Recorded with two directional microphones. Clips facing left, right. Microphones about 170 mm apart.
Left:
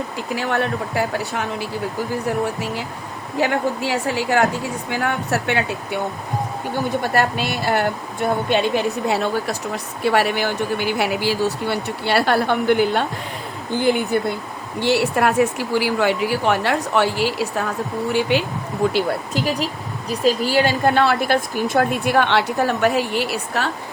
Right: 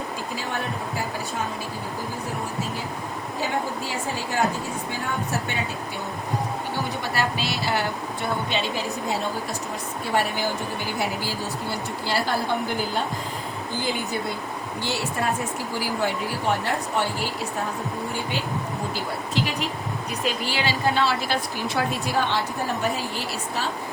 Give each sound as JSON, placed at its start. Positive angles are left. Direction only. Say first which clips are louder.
{"t": 0.3, "sound": "speech", "louder": "left 10 dB", "side_deg": 70}
{"t": 3.4, "sound": "speech", "louder": "left 8 dB", "side_deg": 75}
{"t": 7.0, "sound": "speech", "louder": "left 6 dB", "side_deg": 55}
{"t": 13.8, "sound": "a woman's voice", "louder": "left 10 dB", "side_deg": 60}
{"t": 19.3, "sound": "a woman's voice", "louder": "left 4 dB", "side_deg": 40}